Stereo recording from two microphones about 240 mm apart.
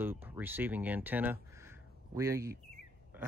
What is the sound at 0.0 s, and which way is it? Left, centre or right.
Speech, centre.